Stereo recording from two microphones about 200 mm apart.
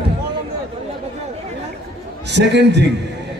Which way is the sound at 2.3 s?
60° right (ahead or behind).